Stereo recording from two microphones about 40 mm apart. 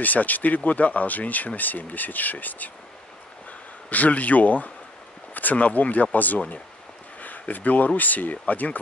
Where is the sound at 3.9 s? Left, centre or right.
Left.